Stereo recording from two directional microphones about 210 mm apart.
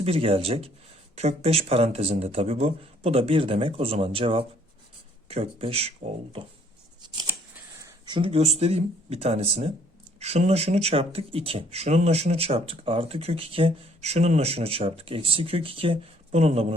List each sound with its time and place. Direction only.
0.0 s speech: 30° right (ahead or behind)
7.8 s speech: 20° right (ahead or behind)